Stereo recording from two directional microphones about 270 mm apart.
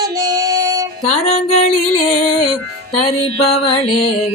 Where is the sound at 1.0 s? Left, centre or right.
Left.